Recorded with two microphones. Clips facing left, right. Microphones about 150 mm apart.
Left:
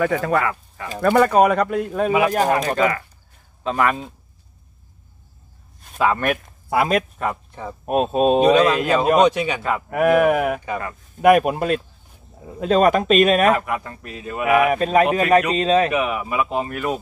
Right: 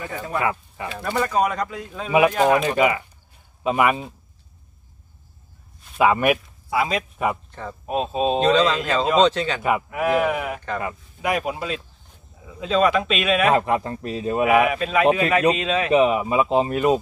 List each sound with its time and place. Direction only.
0.0 s speech: 90° left
0.4 s speech: 20° right (ahead or behind)
1.0 s speech: 60° left (ahead or behind)
2.3 s speech: 40° left (ahead or behind)
2.8 s speech: 15° right (ahead or behind)
5.9 s speech: 10° right (ahead or behind)
6.4 s speech: 55° left (ahead or behind)
8.4 s speech: 10° left (ahead or behind)
9.6 s speech: 15° right (ahead or behind)
9.8 s a man's voice: 55° left (ahead or behind)
13.5 s a man's voice: 30° right (ahead or behind)
14.7 s speech: 40° left (ahead or behind)
15.9 s a man's voice: 30° right (ahead or behind)